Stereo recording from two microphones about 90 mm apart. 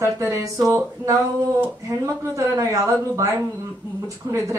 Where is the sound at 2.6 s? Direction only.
35° right (ahead or behind).